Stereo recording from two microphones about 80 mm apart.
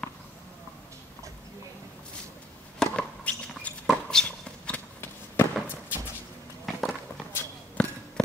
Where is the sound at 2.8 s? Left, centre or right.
Centre.